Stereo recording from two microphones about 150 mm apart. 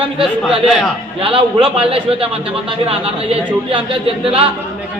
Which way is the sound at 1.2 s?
35° right (ahead or behind).